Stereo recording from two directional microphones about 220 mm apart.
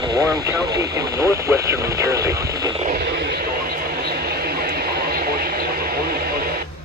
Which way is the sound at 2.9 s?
50° right (ahead or behind).